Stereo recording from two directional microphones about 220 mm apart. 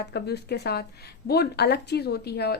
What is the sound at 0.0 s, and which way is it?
Speech, 50° left (ahead or behind).